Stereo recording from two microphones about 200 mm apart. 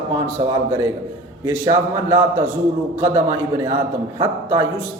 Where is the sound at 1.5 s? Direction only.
10° right (ahead or behind).